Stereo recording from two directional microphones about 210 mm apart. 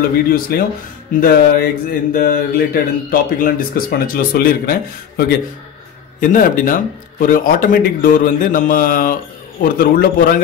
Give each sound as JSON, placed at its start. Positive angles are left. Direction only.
{"t": 0.3, "sound": "speech", "side_deg": 45}
{"t": 6.3, "sound": "speech", "side_deg": 40}